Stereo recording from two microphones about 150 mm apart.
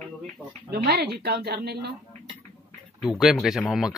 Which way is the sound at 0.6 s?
90° right.